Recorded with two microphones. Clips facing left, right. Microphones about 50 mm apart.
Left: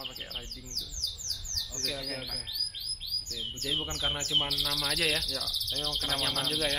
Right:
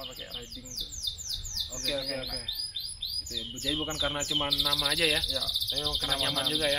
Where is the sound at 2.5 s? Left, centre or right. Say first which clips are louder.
Even; left.